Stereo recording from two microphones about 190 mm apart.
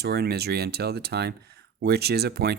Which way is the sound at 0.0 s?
55° right (ahead or behind).